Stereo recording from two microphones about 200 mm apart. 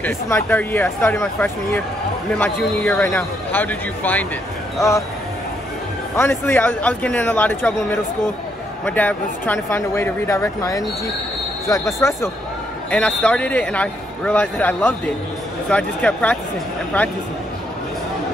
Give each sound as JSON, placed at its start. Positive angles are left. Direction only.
{"t": 0.0, "sound": "a man's voice", "side_deg": 10}
{"t": 6.1, "sound": "a man's voice", "side_deg": 10}